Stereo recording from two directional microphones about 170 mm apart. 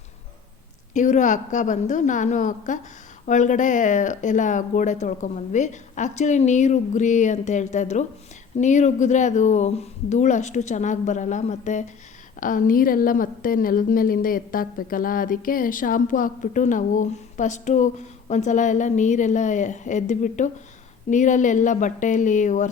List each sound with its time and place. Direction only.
0.9 s a woman's voice: 45° left (ahead or behind)